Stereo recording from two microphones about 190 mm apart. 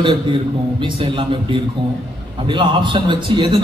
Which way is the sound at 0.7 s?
25° right (ahead or behind).